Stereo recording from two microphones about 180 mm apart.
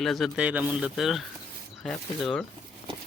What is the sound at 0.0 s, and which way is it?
Speech, centre (ahead or behind).